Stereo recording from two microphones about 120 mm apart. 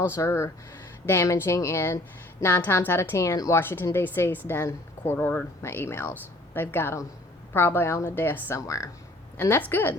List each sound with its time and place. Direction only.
0.1 s a woman's voice: 20° left (ahead or behind)
9.4 s a woman's voice: 15° left (ahead or behind)